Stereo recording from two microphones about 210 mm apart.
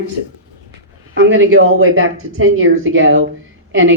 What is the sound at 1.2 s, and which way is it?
Speech, 65° right (ahead or behind).